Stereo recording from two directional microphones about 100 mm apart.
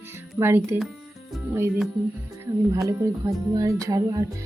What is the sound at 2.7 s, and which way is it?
Speech, 35° right (ahead or behind).